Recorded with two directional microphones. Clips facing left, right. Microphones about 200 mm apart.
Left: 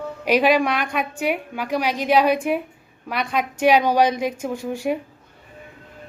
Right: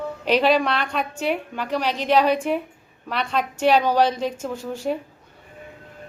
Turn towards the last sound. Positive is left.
turn(degrees=10)  # may be behind; listen again after turning